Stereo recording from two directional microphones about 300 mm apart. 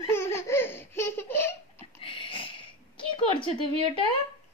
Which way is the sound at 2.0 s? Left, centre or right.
Centre.